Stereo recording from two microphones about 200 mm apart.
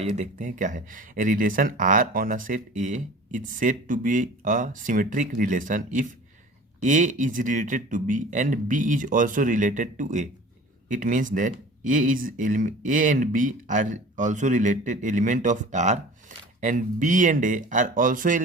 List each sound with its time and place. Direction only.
0.0 s speech: 30° right (ahead or behind)